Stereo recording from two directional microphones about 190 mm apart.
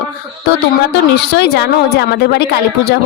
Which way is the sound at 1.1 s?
60° left (ahead or behind).